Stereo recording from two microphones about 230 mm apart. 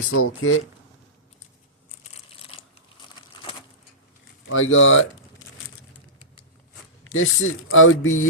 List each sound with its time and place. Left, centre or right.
0.1 s speech: left
4.4 s speech: left
7.1 s speech: left